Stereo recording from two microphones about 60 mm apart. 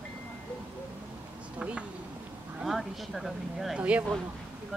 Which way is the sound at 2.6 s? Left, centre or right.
Centre.